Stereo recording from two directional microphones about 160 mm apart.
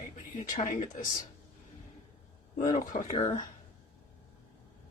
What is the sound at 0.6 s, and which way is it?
Speech, 50° left (ahead or behind).